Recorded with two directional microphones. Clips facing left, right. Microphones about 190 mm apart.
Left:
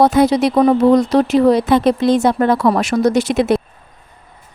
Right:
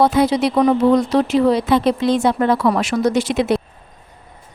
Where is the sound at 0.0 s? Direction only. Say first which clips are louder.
Left 3 dB; 45° left (ahead or behind).